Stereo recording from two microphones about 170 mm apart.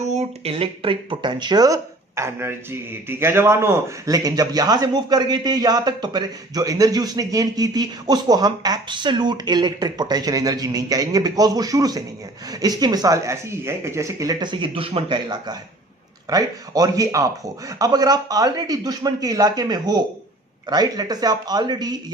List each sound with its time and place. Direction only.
0.0 s speech: 40° right (ahead or behind); by 21.9 s 25° right (ahead or behind)